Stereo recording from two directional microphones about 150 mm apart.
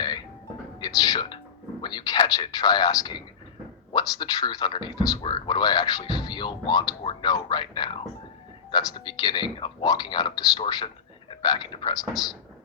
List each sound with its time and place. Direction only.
0.8 s music: 25° left (ahead or behind)
1.8 s a sound: 30° left (ahead or behind)
3.9 s speech: 30° left (ahead or behind)